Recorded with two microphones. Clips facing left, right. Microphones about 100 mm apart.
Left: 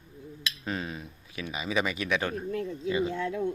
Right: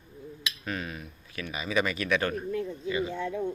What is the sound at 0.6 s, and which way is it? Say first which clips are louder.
Speech: left 1 dB; 20° left (ahead or behind).